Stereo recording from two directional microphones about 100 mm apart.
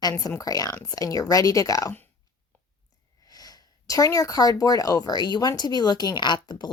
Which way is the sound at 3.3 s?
40° left (ahead or behind).